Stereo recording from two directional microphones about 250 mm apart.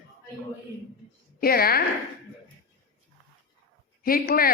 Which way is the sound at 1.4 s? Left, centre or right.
Left.